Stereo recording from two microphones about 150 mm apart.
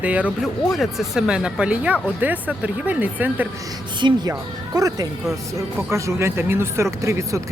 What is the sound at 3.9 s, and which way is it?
Speech, 30° right (ahead or behind).